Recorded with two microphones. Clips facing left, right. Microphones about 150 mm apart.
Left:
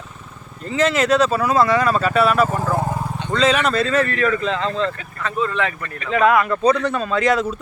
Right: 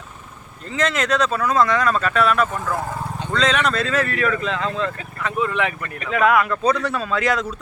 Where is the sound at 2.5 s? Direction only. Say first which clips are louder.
Left 4 dB; 30° left (ahead or behind).